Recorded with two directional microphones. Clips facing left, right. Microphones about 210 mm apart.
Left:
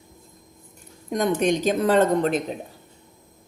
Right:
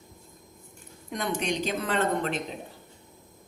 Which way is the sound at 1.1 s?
45° left (ahead or behind).